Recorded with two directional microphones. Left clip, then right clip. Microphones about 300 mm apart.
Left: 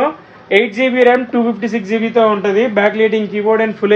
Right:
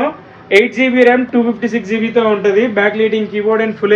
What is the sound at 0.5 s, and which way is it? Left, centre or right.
A man's voice, left.